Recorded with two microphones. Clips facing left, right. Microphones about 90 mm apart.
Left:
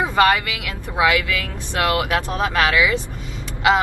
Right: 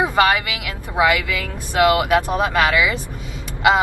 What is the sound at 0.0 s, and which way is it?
Speech, 15° right (ahead or behind).